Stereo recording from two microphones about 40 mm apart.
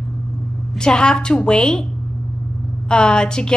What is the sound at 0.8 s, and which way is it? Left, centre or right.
A woman's voice, left.